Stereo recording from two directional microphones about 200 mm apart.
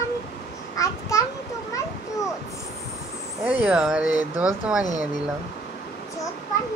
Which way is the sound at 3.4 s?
5° right (ahead or behind).